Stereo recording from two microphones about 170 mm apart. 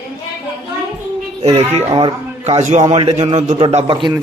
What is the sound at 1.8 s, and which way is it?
A man's voice, 25° right (ahead or behind).